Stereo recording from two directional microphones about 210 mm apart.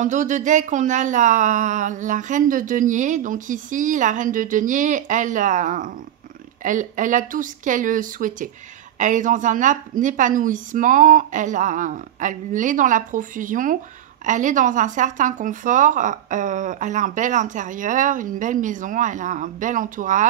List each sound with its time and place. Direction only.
0.0 s speech: 40° right (ahead or behind)